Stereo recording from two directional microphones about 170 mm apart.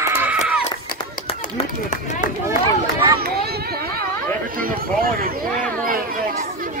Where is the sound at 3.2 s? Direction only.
65° right (ahead or behind).